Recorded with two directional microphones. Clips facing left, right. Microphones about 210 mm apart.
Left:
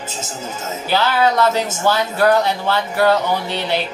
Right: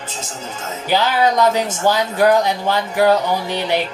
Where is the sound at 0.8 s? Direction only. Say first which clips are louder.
Even; 15° right (ahead or behind).